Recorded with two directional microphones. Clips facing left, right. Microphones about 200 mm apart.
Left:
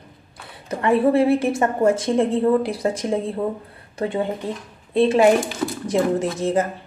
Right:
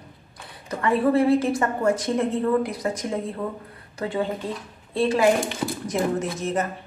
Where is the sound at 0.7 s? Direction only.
25° left (ahead or behind).